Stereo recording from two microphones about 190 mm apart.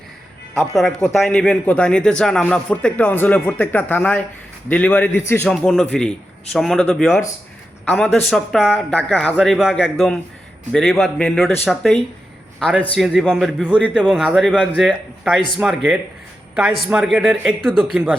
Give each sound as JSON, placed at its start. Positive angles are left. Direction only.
{"t": 0.7, "sound": "a man's voice", "side_deg": 0}